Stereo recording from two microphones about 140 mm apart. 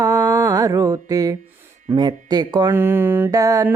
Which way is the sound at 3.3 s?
25° right (ahead or behind).